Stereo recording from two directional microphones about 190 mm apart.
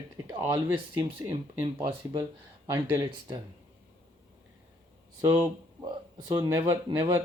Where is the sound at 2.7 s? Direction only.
25° right (ahead or behind).